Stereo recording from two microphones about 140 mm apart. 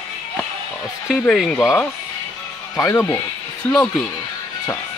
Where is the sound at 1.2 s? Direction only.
5° left (ahead or behind).